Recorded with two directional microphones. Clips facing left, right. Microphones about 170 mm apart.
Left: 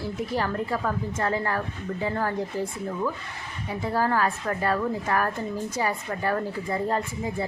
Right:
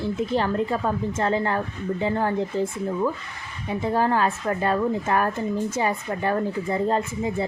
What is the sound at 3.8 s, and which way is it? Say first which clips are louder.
Speech: right 3 dB; 20° right (ahead or behind).